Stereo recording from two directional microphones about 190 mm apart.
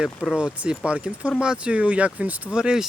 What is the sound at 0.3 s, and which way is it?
Speech, 5° right (ahead or behind).